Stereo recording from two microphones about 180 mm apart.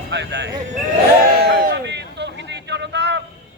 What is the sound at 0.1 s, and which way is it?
Speech, 75° right (ahead or behind).